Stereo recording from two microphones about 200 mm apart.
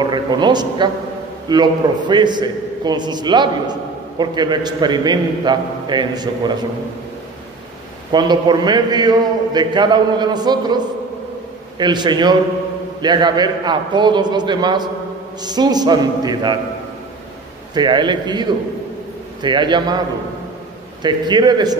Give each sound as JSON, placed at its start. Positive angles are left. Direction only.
{"t": 0.0, "sound": "a man's voice", "side_deg": -20}
{"t": 8.1, "sound": "a man's voice", "side_deg": -20}
{"t": 11.8, "sound": "a man's voice", "side_deg": -20}
{"t": 17.7, "sound": "a man's voice", "side_deg": -20}
{"t": 21.0, "sound": "a man's voice", "side_deg": -20}